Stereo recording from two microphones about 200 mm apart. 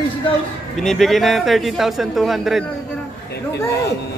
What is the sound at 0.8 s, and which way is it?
A man's voice, centre (ahead or behind).